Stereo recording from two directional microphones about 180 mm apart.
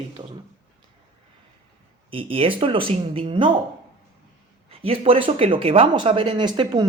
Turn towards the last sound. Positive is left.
turn(degrees=-25)  # may be behind; listen again after turning